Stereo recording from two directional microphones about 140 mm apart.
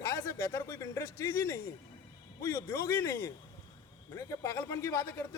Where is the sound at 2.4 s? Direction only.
20° left (ahead or behind).